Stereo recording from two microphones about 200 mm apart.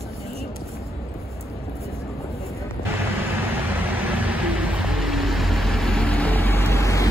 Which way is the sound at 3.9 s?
10° right (ahead or behind).